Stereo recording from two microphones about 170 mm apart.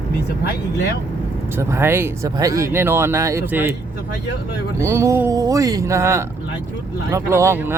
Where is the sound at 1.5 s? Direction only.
15° right (ahead or behind).